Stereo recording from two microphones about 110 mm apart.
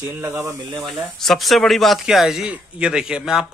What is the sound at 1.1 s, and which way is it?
A man's voice, centre (ahead or behind).